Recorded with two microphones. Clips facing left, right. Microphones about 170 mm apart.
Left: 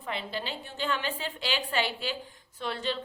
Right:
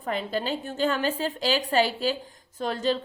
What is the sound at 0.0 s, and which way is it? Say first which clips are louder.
A woman's voice: right 7 dB; 45° right (ahead or behind).